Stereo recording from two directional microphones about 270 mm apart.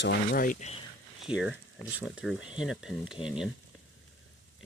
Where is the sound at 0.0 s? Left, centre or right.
Left.